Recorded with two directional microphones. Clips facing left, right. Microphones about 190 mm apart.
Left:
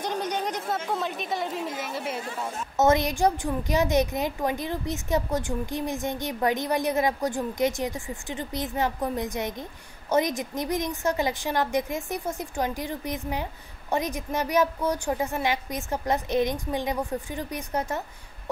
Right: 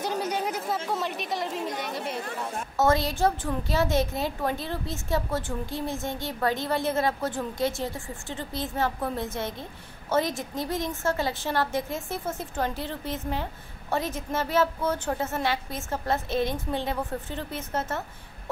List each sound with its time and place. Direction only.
0.0 s speech: 5° right (ahead or behind)
2.8 s a woman's voice: 20° left (ahead or behind)